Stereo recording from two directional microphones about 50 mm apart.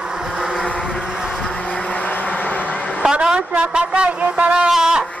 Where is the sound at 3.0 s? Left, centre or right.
Centre.